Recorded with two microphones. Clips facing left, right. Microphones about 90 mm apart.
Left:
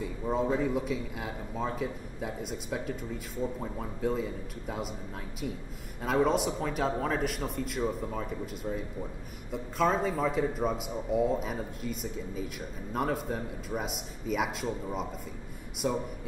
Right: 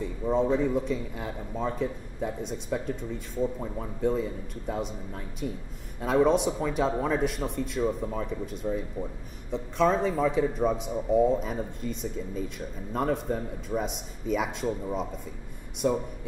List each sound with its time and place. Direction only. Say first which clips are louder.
0.0 s a man's voice: right 4 dB; 5° left (ahead or behind)